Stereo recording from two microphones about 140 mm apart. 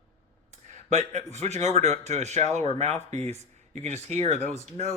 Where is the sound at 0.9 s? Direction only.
55° right (ahead or behind).